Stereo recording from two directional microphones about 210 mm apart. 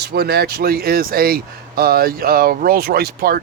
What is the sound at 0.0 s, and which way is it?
Speech, 50° right (ahead or behind).